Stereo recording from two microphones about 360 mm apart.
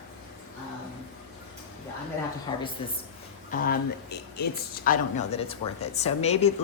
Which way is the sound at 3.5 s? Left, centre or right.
Left.